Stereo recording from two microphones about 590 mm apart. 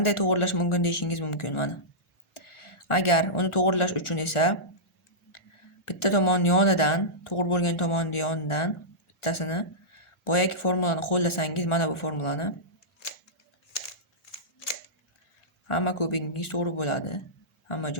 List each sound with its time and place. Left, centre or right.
0.0 s speech: left
5.8 s speech: left
15.6 s a man's voice: left